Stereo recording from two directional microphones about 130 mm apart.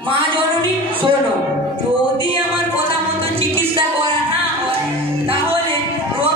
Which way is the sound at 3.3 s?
45° right (ahead or behind).